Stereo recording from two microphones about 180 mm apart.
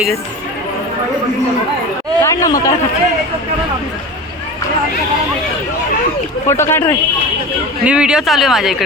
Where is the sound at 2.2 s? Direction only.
20° left (ahead or behind).